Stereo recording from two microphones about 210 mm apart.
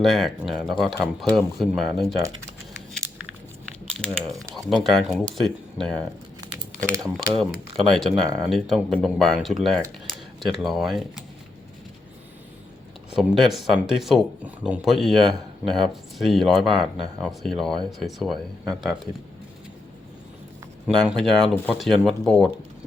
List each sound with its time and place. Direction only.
0.0 s speech: centre (ahead or behind)
4.5 s speech: centre (ahead or behind)
6.9 s speech: 15° right (ahead or behind)
7.3 s speech: centre (ahead or behind)
13.1 s speech: centre (ahead or behind)
20.8 s speech: centre (ahead or behind)